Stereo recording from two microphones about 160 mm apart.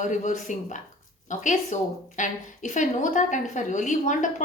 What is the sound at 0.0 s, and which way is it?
A woman's voice, 50° left (ahead or behind).